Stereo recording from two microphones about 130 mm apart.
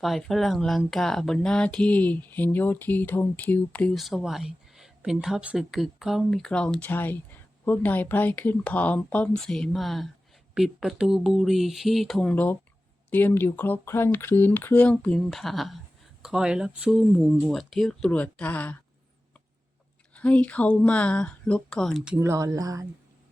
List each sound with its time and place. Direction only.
0.0 s speech: centre (ahead or behind)
3.9 s speech: centre (ahead or behind)
12.3 s speech: 15° left (ahead or behind)
20.1 s speech: 10° left (ahead or behind)
22.2 s speech: 25° right (ahead or behind)